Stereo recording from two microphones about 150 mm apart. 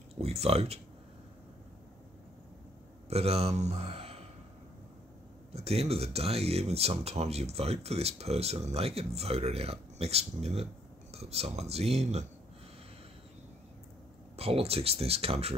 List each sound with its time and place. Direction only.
0.2 s speech: 45° right (ahead or behind)
3.1 s a man's voice: 45° right (ahead or behind)
5.5 s speech: 45° right (ahead or behind)
14.3 s speech: 40° right (ahead or behind)